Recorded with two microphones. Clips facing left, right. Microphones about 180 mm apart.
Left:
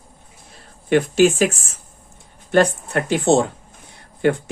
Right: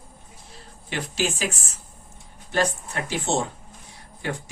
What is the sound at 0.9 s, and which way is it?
Speech, 55° left (ahead or behind).